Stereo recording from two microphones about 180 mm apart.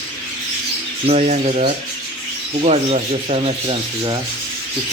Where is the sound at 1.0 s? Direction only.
35° right (ahead or behind).